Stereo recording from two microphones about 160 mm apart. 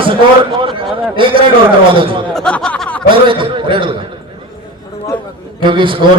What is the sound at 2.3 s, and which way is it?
Speech, 5° left (ahead or behind).